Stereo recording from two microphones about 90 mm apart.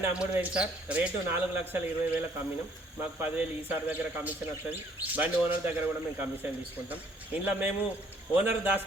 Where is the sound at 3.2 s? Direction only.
20° right (ahead or behind).